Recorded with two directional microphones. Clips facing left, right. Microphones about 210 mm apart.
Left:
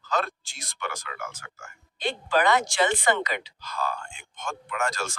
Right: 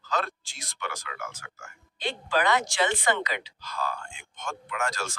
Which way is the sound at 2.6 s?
50° left (ahead or behind).